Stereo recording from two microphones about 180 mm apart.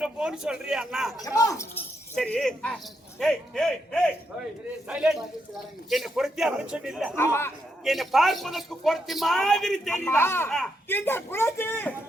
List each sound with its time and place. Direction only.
0.0 s a man's voice: 5° right (ahead or behind)
1.2 s speech: 20° left (ahead or behind)
2.1 s a man's voice: 5° left (ahead or behind)